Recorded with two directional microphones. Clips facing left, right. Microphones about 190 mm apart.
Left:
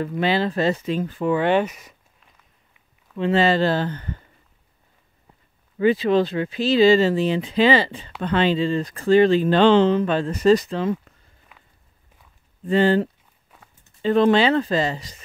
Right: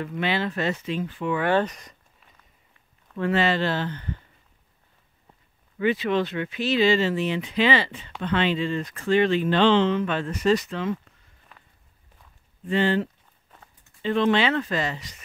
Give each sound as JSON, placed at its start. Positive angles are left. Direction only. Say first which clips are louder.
{"t": 0.0, "sound": "speech", "louder": "left 5 dB", "side_deg": 35}
{"t": 1.6, "sound": "a sound", "louder": "left 2 dB", "side_deg": 5}
{"t": 3.2, "sound": "speech", "louder": "left 4 dB", "side_deg": 30}
{"t": 5.8, "sound": "speech", "louder": "left 5 dB", "side_deg": 35}
{"t": 12.6, "sound": "speech", "louder": "left 5 dB", "side_deg": 40}